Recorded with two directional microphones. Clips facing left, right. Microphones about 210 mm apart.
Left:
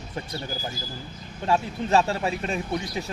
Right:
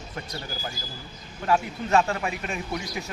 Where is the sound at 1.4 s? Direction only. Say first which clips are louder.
Even; 30° left (ahead or behind).